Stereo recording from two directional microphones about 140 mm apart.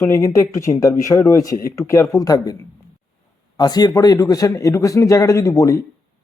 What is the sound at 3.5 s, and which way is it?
A man's voice, 30° left (ahead or behind).